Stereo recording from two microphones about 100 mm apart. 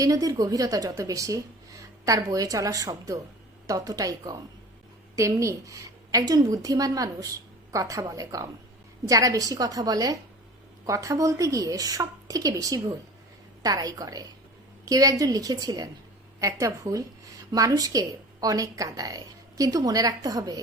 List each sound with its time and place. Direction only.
0.0 s a woman's voice: 35° right (ahead or behind)